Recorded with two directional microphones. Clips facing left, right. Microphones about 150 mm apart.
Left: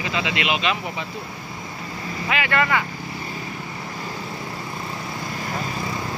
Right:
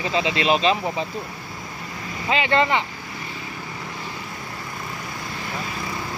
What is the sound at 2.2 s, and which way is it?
Speech, 25° right (ahead or behind).